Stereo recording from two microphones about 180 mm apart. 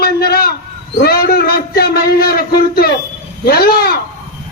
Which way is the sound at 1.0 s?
60° left (ahead or behind).